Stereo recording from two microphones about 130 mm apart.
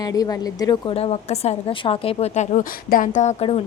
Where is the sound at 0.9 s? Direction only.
50° left (ahead or behind); by 3.3 s 80° left.